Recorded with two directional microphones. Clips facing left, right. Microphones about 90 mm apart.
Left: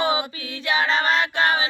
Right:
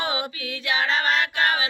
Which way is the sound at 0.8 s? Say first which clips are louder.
Left 2 dB; 35° left (ahead or behind).